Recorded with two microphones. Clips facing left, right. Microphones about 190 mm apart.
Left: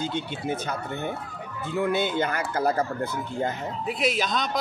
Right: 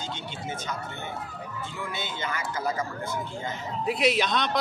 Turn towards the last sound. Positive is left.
turn(degrees=0)  # may be behind; listen again after turning